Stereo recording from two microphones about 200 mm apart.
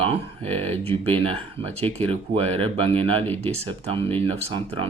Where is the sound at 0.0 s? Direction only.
30° right (ahead or behind).